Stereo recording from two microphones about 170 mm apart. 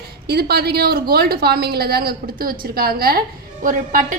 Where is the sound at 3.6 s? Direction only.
50° right (ahead or behind).